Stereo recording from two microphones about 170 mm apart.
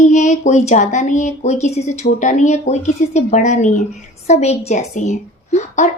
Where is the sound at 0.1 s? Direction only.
45° left (ahead or behind).